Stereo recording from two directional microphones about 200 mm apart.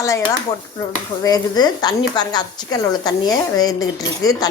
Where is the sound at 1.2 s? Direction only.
20° left (ahead or behind).